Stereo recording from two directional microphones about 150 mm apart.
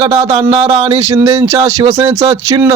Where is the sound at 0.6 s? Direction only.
20° right (ahead or behind).